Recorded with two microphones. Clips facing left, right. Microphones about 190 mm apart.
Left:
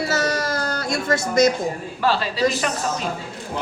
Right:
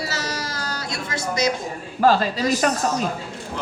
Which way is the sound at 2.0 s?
45° right (ahead or behind).